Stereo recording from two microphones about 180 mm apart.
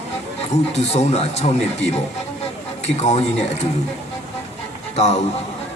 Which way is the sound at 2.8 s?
35° left (ahead or behind).